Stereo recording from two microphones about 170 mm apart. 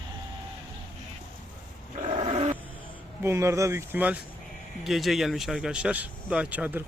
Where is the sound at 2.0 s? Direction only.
45° right (ahead or behind).